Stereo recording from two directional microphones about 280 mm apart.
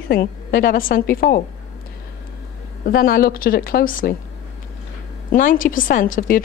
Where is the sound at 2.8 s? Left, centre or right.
Left.